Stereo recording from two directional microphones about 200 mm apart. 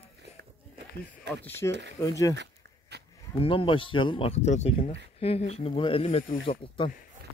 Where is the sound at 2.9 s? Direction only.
55° right (ahead or behind).